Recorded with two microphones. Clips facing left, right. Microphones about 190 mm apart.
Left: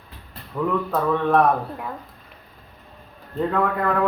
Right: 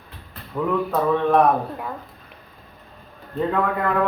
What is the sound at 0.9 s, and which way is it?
Speech, centre (ahead or behind).